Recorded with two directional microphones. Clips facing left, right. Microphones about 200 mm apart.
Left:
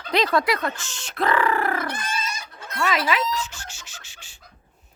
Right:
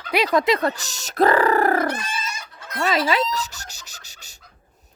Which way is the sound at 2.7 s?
35° right (ahead or behind).